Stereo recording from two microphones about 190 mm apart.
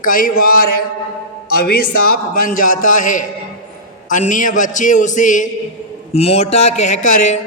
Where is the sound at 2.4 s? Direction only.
45° left (ahead or behind).